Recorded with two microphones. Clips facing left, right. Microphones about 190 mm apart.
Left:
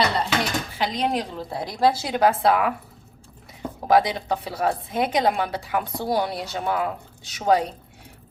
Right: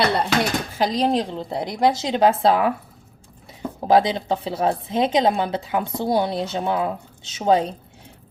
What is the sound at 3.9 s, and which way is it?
A woman's voice, 25° right (ahead or behind).